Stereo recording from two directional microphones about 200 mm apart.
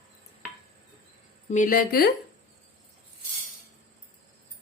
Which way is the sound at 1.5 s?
40° left (ahead or behind).